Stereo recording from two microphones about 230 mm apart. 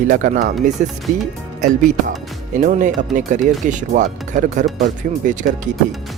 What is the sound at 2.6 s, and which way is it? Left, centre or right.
Speech, right.